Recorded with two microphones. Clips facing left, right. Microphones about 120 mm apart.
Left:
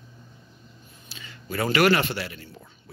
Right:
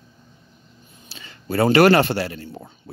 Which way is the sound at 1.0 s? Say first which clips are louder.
Right 6 dB; 35° right (ahead or behind).